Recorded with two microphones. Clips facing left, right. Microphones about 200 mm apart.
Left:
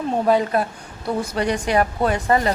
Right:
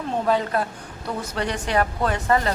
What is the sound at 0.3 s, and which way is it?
A woman's voice, 15° left (ahead or behind).